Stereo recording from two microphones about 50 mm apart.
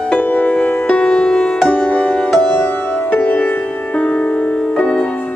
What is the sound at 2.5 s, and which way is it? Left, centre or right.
Music, left.